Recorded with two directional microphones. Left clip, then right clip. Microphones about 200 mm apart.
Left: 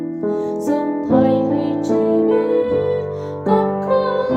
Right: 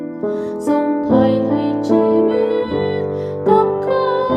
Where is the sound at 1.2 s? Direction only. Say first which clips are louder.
Right 1 dB; 35° right (ahead or behind).